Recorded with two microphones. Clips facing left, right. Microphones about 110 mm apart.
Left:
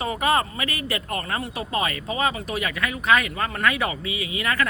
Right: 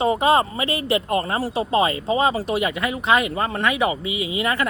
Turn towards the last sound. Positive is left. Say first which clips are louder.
# right 3 dB
turn(degrees=-25)  # may be behind; listen again after turning